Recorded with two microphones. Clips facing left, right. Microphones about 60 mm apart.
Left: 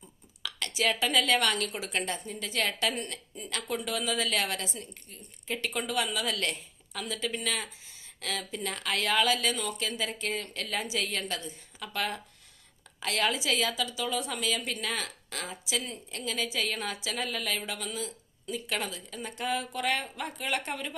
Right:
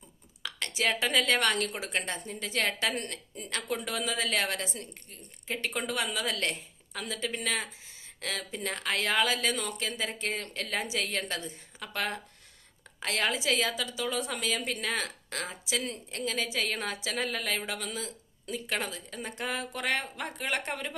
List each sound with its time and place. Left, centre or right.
0.4 s a woman's voice: right
17.7 s a woman's voice: right